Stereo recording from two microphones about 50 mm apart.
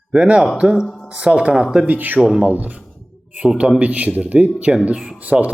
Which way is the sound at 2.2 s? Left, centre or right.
Centre.